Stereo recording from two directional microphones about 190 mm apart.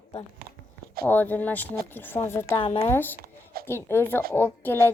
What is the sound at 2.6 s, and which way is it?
Speech, 30° left (ahead or behind).